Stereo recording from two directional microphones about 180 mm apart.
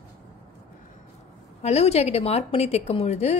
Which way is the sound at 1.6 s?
35° left (ahead or behind).